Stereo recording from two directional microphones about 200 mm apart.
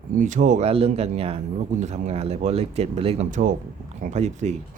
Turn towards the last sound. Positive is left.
turn(degrees=-35)  # may be behind; listen again after turning